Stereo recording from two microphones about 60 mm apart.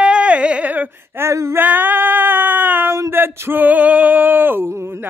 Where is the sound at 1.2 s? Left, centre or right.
Right.